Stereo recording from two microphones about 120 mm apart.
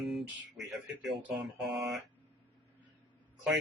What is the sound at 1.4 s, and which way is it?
Speech, centre (ahead or behind).